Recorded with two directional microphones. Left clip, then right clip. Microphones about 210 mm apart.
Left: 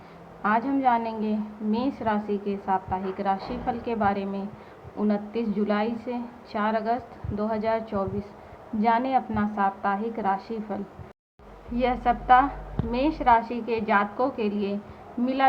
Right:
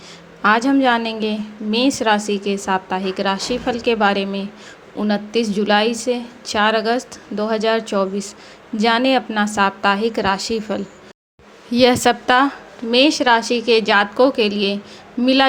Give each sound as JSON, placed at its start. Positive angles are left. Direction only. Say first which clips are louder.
{"t": 0.4, "sound": "a woman's voice", "louder": "right 8 dB", "side_deg": -40}